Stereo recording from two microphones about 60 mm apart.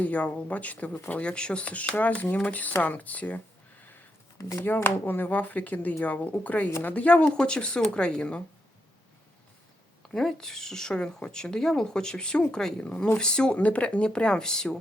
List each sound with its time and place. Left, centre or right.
0.0 s speech: left
4.4 s speech: left
4.6 s a woman's voice: left
10.1 s a woman's voice: centre